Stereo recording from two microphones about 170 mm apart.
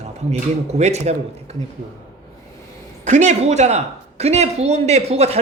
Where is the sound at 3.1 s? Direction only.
45° right (ahead or behind).